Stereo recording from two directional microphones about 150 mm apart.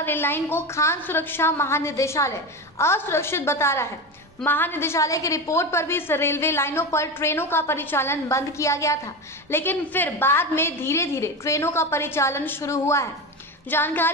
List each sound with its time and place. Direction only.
0.0 s a woman's voice: 15° left (ahead or behind)